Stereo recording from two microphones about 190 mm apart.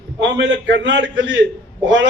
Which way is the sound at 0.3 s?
70° right (ahead or behind).